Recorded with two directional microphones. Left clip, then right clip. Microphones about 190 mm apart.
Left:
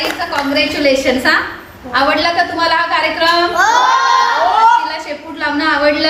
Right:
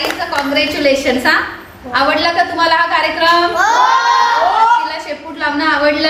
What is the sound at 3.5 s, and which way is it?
Speech, 50° left (ahead or behind).